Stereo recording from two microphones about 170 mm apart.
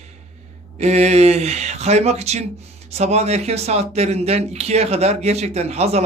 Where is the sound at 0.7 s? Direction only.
40° right (ahead or behind).